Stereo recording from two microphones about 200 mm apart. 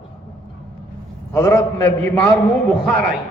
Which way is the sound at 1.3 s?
15° left (ahead or behind).